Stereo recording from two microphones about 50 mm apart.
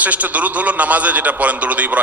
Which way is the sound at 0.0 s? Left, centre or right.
Right.